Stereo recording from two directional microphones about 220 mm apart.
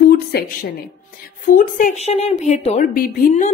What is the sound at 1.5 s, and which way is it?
A woman's voice, 35° left (ahead or behind).